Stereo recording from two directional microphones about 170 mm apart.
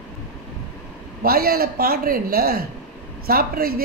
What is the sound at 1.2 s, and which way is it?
A woman's voice, 65° right (ahead or behind).